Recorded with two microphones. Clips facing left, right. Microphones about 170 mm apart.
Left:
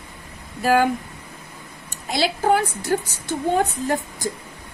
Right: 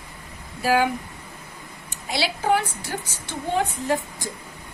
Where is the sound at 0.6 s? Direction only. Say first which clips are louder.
Left 3 dB; 45° left (ahead or behind).